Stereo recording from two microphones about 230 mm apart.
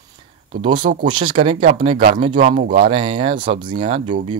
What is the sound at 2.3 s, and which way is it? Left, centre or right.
Speech, right.